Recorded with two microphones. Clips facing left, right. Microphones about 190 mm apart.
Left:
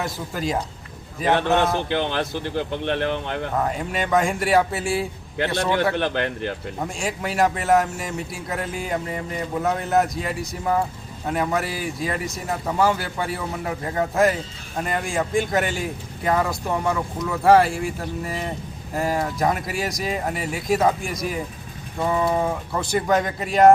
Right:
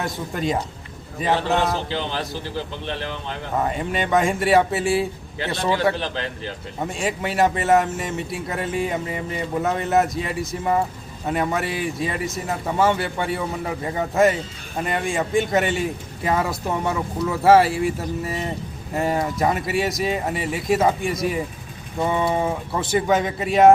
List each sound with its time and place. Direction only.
0.0 s a man's voice: centre (ahead or behind)
1.4 s a man's voice: 60° left (ahead or behind)
3.6 s a man's voice: centre (ahead or behind)
6.0 s a man's voice: 60° left (ahead or behind)
6.8 s a man's voice: centre (ahead or behind)